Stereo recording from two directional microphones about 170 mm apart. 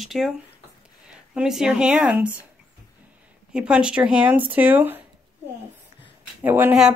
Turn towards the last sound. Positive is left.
turn(degrees=-10)  # may be behind; listen again after turning